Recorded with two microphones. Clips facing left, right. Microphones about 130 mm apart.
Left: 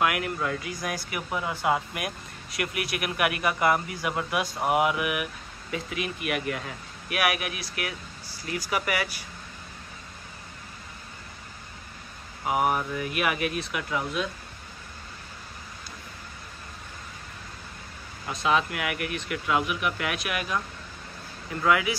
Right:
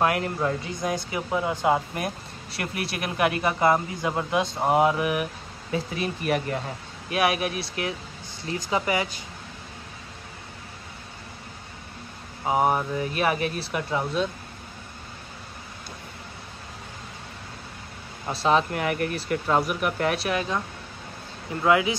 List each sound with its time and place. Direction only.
0.0 s speech: 35° right (ahead or behind)
2.0 s speech: 30° right (ahead or behind)
12.4 s speech: 30° right (ahead or behind)
18.2 s speech: 35° right (ahead or behind)
21.6 s speech: 25° right (ahead or behind)